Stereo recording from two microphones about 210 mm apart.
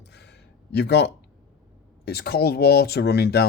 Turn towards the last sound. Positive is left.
turn(degrees=50)  # may be behind; listen again after turning